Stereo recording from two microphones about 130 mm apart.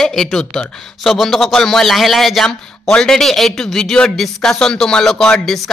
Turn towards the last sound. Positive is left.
turn(degrees=0)  # may be behind; listen again after turning